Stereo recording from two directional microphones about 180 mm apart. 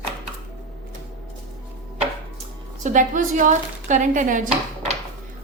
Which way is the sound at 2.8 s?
45° right (ahead or behind).